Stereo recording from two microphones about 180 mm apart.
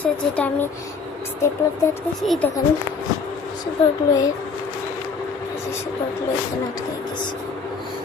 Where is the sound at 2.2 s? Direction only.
Centre (ahead or behind).